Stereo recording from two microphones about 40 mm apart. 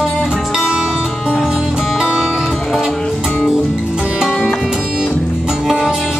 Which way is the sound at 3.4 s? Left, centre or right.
Centre.